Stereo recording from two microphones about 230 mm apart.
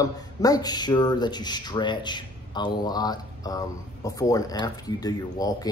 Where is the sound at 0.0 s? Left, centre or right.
Centre.